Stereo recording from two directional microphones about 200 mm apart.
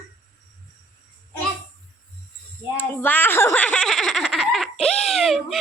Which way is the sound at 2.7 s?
10° left (ahead or behind).